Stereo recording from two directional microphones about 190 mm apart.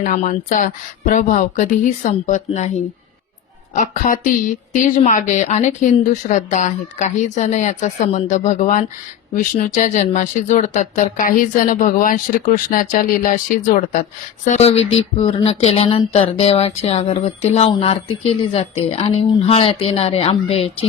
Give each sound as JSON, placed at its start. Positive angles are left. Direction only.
{"t": 0.0, "sound": "speech", "side_deg": 40}
{"t": 3.8, "sound": "speech", "side_deg": 45}